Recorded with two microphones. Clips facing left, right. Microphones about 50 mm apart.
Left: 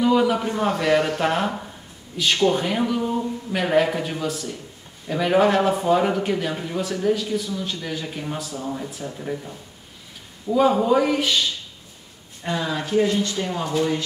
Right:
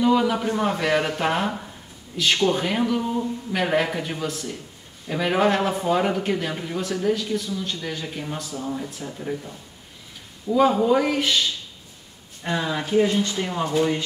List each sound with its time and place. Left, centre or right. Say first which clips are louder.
0.0 s a man's voice: left 1 dB; centre
12.6 s speech: even; centre